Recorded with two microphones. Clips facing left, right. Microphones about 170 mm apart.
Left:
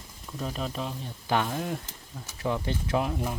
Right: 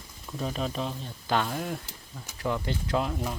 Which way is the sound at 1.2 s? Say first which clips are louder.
Left 1 dB; 15° left (ahead or behind).